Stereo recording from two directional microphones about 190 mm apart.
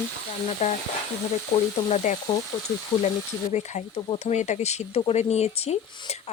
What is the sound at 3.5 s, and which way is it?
Speech, 35° left (ahead or behind).